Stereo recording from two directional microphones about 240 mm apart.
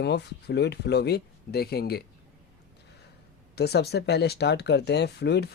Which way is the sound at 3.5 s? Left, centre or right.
Left.